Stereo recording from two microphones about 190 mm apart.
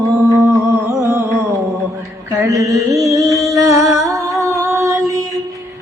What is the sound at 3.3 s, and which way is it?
Music, 15° right (ahead or behind).